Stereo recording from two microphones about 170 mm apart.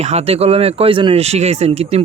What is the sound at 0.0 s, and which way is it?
Speech, 40° right (ahead or behind).